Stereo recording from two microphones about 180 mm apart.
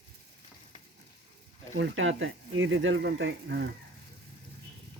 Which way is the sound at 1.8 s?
85° right.